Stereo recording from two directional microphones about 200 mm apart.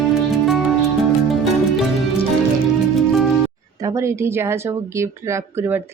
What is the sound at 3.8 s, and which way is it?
Speech, 15° right (ahead or behind).